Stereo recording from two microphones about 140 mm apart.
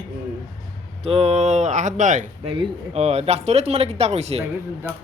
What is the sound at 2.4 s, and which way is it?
Speech, 45° right (ahead or behind).